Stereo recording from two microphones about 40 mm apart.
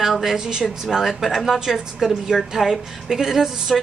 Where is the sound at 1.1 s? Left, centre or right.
Centre.